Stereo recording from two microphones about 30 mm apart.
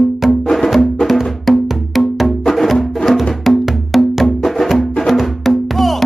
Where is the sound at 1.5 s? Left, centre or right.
Centre.